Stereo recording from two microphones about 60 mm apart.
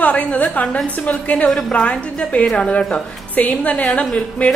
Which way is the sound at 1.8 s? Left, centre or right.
Left.